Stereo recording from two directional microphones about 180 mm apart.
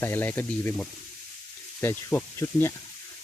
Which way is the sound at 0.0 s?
10° left (ahead or behind).